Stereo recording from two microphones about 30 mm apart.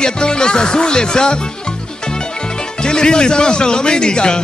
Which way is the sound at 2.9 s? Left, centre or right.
Left.